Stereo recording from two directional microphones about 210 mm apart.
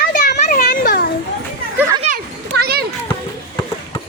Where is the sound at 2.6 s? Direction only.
50° right (ahead or behind).